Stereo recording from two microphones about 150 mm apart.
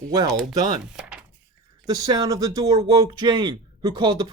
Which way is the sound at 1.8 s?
25° right (ahead or behind).